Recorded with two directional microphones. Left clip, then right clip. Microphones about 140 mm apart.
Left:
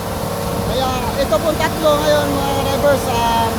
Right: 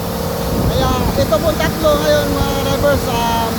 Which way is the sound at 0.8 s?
Centre (ahead or behind).